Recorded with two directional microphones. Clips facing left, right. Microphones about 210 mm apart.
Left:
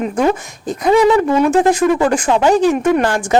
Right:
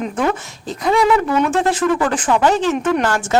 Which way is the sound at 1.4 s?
15° left (ahead or behind).